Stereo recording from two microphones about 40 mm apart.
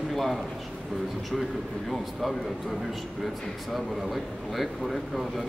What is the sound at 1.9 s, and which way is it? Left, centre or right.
Speech, centre.